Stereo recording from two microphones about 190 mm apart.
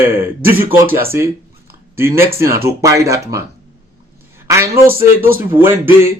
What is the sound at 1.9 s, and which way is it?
Speech, 15° right (ahead or behind).